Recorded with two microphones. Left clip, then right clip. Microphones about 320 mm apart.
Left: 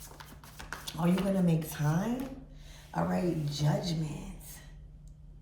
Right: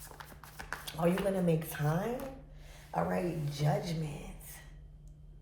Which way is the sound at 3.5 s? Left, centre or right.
Centre.